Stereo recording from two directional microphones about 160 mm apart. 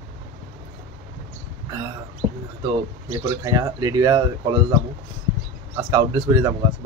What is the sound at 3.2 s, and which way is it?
Speech, 20° right (ahead or behind).